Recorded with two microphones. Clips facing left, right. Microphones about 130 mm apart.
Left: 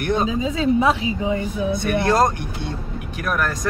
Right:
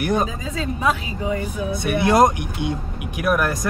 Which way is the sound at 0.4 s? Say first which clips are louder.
Left 7 dB; 30° left (ahead or behind).